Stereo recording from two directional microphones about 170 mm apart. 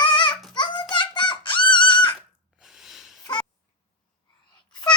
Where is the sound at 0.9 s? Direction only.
25° left (ahead or behind).